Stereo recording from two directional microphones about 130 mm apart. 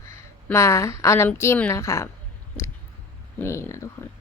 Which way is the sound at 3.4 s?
20° left (ahead or behind).